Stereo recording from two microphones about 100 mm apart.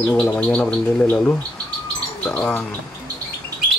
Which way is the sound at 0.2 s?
10° left (ahead or behind).